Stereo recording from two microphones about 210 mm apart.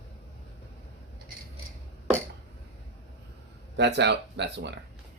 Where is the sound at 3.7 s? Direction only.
55° right (ahead or behind).